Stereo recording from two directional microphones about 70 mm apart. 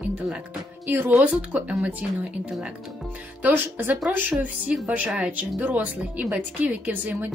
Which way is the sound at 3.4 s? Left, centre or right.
Right.